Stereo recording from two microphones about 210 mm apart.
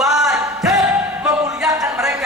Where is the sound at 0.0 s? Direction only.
Centre (ahead or behind).